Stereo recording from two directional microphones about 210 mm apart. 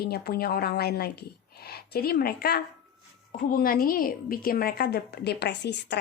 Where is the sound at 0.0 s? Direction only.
45° left (ahead or behind).